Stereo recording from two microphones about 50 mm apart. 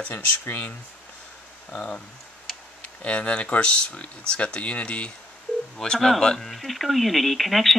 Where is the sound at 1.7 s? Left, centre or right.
Left.